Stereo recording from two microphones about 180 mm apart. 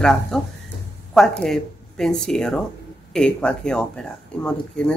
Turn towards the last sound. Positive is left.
turn(degrees=5)  # may be behind; listen again after turning